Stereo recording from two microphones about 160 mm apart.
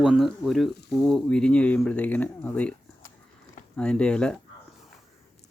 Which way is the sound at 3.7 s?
5° left (ahead or behind).